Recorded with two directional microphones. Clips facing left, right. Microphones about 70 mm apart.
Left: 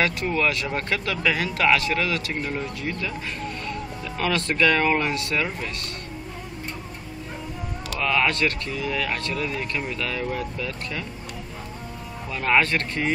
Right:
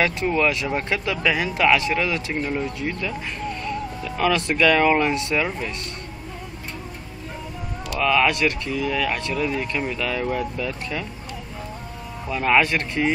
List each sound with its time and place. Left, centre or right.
0.2 s speech: centre
4.3 s speech: centre
8.0 s speech: centre
8.3 s speech: centre
12.3 s speech: centre